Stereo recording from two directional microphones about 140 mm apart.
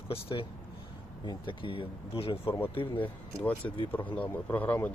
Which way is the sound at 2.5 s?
15° left (ahead or behind).